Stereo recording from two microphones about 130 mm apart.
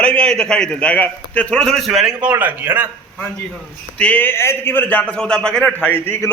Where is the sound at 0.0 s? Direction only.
10° left (ahead or behind).